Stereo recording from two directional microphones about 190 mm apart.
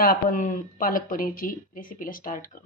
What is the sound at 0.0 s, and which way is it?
Speech, 45° left (ahead or behind).